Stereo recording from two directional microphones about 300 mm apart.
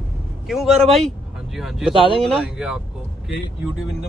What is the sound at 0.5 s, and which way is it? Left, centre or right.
A man's voice, centre.